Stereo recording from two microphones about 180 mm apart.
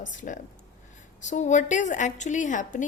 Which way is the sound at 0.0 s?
45° left (ahead or behind).